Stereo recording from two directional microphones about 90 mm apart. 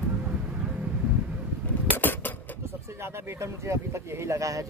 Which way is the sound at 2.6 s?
30° right (ahead or behind).